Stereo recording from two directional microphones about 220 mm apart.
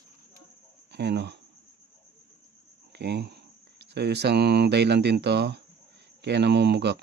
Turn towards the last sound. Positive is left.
turn(degrees=-50)  # may be behind; listen again after turning